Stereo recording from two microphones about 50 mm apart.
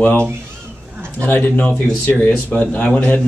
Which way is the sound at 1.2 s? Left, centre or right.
Left.